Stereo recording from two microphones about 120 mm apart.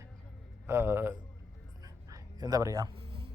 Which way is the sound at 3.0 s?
50° right (ahead or behind).